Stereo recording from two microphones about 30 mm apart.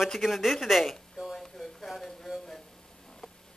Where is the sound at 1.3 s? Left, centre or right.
Centre.